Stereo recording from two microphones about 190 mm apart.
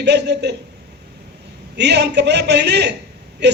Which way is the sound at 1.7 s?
60° right (ahead or behind).